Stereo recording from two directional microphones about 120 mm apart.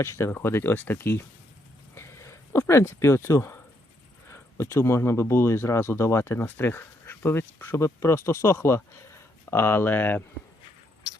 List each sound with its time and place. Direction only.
0.0 s speech: 20° left (ahead or behind)
2.0 s a sound: 25° left (ahead or behind)
4.3 s speech: 20° left (ahead or behind)